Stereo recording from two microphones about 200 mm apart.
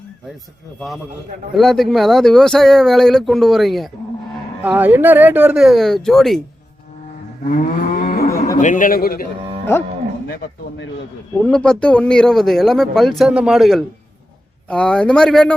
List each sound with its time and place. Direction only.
1.5 s a man's voice: centre (ahead or behind)
7.5 s moo: 40° left (ahead or behind)
8.5 s a man's voice: 40° left (ahead or behind)
10.2 s a man's voice: 55° left (ahead or behind)
11.4 s a man's voice: 5° left (ahead or behind)